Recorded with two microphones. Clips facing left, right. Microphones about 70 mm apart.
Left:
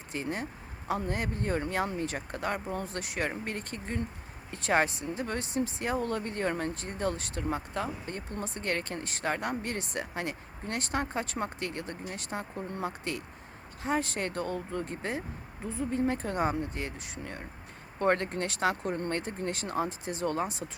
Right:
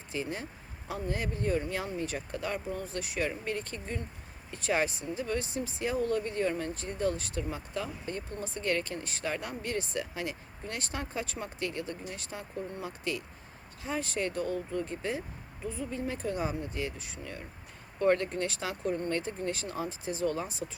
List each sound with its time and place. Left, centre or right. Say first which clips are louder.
0.1 s speech: left 1 dB; left